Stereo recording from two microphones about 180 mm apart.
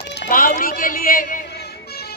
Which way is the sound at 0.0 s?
60° left (ahead or behind).